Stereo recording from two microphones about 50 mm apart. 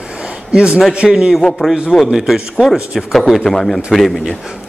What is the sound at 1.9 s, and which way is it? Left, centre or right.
A man's voice, centre.